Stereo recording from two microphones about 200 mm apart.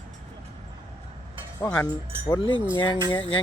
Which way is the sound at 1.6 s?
5° left (ahead or behind).